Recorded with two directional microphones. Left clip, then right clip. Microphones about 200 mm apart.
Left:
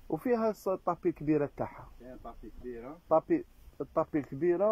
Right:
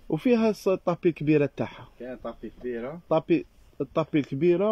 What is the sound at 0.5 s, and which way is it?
Speech, 15° right (ahead or behind).